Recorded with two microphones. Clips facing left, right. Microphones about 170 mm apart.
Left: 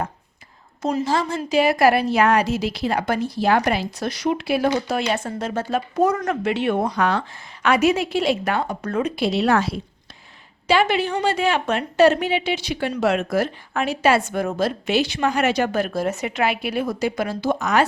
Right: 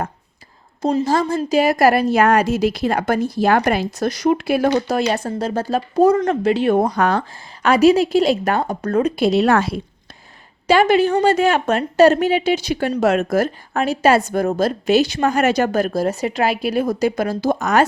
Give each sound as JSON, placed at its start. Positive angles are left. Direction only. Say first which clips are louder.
{"t": 0.8, "sound": "a woman's voice", "louder": "right 4 dB", "side_deg": -30}
{"t": 1.0, "sound": "a woman's voice", "louder": "right 4 dB", "side_deg": -45}